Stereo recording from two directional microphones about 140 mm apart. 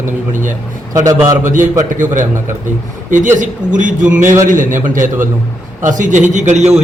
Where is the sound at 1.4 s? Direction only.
70° right (ahead or behind).